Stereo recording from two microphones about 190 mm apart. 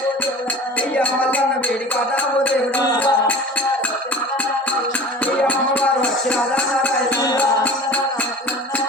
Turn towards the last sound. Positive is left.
turn(degrees=20)  # may be behind; listen again after turning